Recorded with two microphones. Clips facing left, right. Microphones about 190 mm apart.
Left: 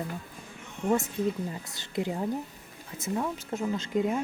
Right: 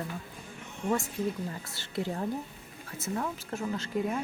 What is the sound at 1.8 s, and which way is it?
Speech, 15° left (ahead or behind).